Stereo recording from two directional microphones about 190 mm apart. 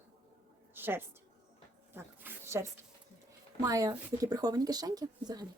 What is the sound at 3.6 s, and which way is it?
Speech, 20° right (ahead or behind).